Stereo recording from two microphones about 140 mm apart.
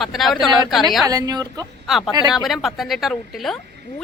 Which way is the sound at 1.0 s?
25° right (ahead or behind).